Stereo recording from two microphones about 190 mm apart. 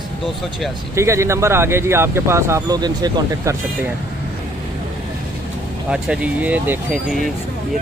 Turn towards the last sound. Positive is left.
turn(degrees=0)  # may be behind; listen again after turning